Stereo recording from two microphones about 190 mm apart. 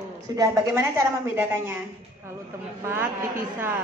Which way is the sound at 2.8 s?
10° right (ahead or behind).